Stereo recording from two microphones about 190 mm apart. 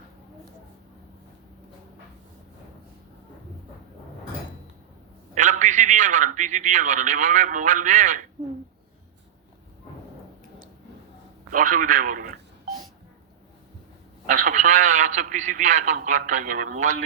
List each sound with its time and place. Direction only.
5.3 s a man's voice: 40° right (ahead or behind)
11.5 s telephone dialing: 45° right (ahead or behind)
14.3 s a man's voice: 40° right (ahead or behind)